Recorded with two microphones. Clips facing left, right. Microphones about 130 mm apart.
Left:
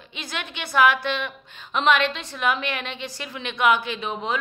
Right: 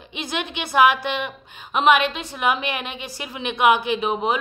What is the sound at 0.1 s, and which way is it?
A woman's voice, 20° right (ahead or behind).